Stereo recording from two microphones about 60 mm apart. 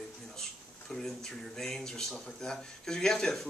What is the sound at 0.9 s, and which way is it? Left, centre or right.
Speech, centre.